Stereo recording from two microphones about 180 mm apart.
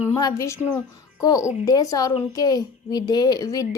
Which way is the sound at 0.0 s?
20° left (ahead or behind).